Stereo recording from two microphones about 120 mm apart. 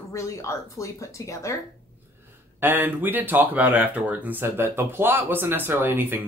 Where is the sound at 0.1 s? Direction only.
25° left (ahead or behind).